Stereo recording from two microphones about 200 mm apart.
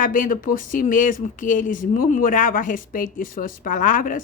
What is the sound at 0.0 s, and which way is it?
Speech, 45° left (ahead or behind).